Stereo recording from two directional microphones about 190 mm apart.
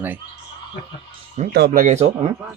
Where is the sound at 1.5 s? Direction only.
55° right (ahead or behind); by 2.1 s 35° right (ahead or behind).